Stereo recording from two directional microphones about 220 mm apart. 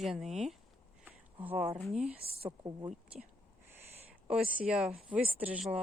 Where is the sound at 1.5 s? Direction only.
25° right (ahead or behind).